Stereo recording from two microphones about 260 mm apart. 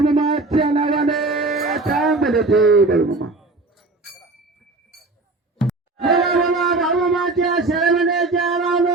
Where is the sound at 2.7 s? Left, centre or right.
Right.